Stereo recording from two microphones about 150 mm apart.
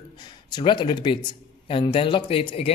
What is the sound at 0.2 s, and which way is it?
Speech, 30° left (ahead or behind).